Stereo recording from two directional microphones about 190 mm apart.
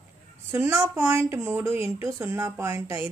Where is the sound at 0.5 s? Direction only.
10° right (ahead or behind).